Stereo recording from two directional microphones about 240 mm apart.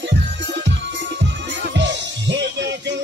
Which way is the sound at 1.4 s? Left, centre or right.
Right.